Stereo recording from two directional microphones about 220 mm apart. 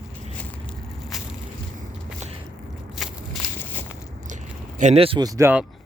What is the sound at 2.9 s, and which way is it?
Walk, centre (ahead or behind).